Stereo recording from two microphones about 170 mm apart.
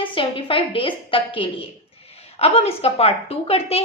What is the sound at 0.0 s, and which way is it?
A woman's voice, 30° left (ahead or behind).